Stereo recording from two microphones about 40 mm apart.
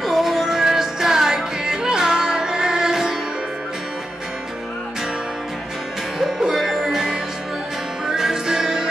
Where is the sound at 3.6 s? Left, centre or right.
Centre.